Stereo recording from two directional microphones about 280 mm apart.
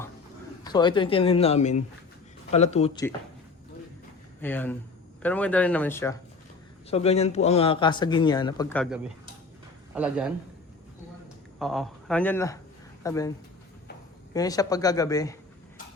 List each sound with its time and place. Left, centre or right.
0.6 s speech: centre
4.4 s speech: centre
6.9 s a man's voice: left
9.9 s speech: centre
11.6 s speech: centre
14.3 s a man's voice: centre